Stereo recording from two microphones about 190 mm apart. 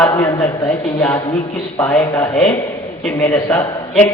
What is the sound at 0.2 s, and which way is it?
A man's voice, 15° left (ahead or behind).